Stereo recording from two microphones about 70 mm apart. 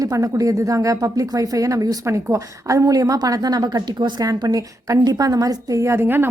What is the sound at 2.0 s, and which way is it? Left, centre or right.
A woman's voice, right.